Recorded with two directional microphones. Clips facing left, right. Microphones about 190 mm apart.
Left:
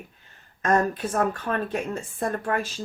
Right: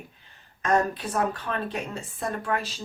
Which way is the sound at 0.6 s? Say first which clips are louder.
Left 2 dB; 45° left (ahead or behind).